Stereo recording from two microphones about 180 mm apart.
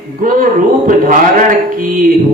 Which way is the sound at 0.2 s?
50° right (ahead or behind).